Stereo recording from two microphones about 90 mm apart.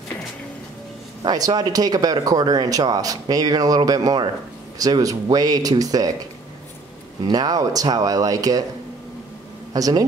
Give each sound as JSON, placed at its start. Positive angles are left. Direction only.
{"t": 1.2, "sound": "speech", "side_deg": -50}
{"t": 7.2, "sound": "speech", "side_deg": -45}
{"t": 9.8, "sound": "speech", "side_deg": -40}